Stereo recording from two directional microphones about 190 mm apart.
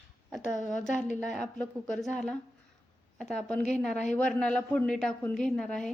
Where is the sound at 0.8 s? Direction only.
40° left (ahead or behind).